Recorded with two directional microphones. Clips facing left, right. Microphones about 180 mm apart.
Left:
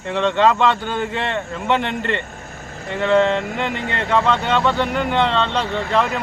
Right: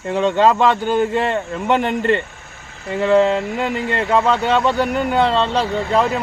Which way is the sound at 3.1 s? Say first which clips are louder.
Right 2 dB; 5° right (ahead or behind).